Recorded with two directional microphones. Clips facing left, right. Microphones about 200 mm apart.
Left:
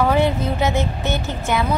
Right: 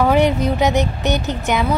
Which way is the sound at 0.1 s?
15° right (ahead or behind).